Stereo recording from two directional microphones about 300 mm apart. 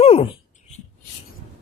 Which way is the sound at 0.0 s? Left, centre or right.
Left.